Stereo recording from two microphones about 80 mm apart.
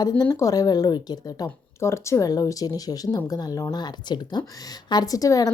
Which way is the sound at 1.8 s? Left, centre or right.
Left.